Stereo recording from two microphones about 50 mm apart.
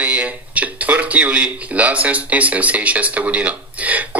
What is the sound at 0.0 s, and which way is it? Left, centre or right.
Speech, right.